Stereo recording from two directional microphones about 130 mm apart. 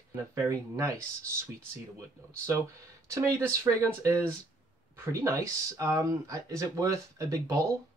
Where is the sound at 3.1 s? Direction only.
25° right (ahead or behind).